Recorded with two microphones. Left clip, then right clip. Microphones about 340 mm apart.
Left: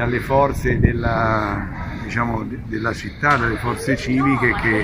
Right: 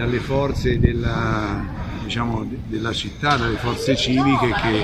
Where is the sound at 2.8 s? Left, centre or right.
Centre.